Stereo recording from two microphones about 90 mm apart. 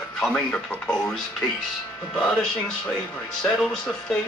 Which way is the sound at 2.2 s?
10° left (ahead or behind).